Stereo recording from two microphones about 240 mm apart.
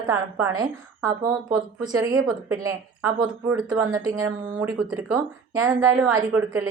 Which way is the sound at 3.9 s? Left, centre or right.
Centre.